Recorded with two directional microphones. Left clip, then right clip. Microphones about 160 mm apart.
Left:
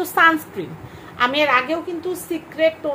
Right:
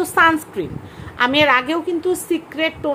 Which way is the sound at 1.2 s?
35° right (ahead or behind).